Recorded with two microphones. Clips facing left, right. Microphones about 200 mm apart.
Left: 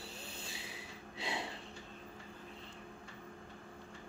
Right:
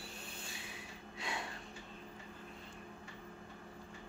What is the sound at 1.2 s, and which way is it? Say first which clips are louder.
Snort: left 2 dB; 30° left (ahead or behind).